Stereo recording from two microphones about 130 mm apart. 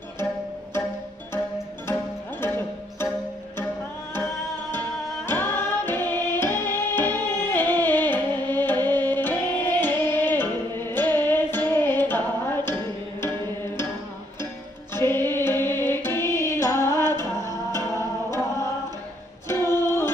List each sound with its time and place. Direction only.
2.4 s music: 15° left (ahead or behind)
4.1 s music: 15° left (ahead or behind)
14.4 s music: 20° left (ahead or behind)
19.4 s music: 20° left (ahead or behind)